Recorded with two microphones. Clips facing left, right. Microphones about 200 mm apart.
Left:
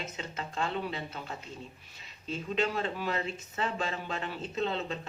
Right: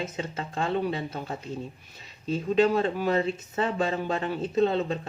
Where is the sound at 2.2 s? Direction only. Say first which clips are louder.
Right 9 dB; 40° right (ahead or behind).